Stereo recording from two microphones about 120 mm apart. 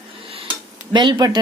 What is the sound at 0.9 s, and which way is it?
Speech, 35° right (ahead or behind).